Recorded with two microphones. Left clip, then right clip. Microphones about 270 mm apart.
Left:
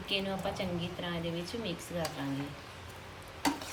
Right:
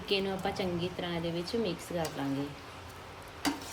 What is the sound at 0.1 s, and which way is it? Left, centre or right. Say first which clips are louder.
Speech: right 2 dB; centre.